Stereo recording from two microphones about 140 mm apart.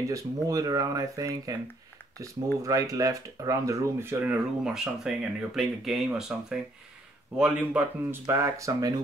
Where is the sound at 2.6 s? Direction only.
25° right (ahead or behind).